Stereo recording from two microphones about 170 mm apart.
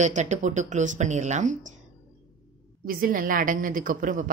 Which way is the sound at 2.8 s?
55° right (ahead or behind).